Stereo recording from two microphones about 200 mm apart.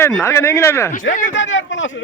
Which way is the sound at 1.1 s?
40° left (ahead or behind).